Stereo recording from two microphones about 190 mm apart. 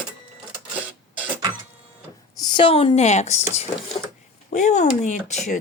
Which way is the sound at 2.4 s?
25° left (ahead or behind).